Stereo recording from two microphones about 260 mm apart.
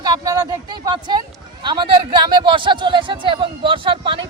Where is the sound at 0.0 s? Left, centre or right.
Centre.